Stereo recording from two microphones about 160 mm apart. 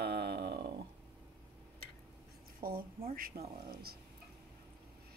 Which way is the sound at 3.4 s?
40° right (ahead or behind).